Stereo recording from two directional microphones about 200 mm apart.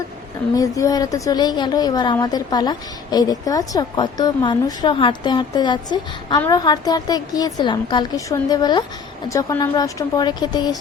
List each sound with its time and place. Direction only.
0.5 s a woman's voice: 15° left (ahead or behind)